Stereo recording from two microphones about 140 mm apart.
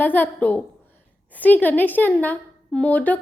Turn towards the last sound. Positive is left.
turn(degrees=10)  # may be behind; listen again after turning